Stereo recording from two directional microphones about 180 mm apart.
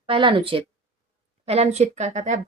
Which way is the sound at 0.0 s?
30° right (ahead or behind).